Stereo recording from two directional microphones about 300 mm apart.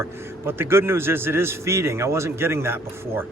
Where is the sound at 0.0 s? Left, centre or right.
Centre.